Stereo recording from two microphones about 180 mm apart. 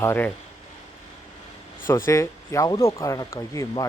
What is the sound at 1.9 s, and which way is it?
Speech, 15° left (ahead or behind).